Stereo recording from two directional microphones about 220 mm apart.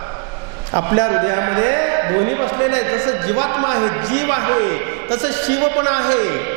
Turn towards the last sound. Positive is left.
turn(degrees=-15)  # may be behind; listen again after turning